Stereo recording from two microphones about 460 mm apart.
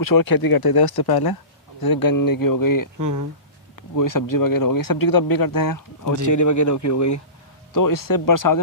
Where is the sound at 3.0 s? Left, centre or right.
Right.